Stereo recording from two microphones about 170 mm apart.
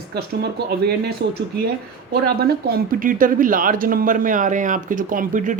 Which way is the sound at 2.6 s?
60° right (ahead or behind).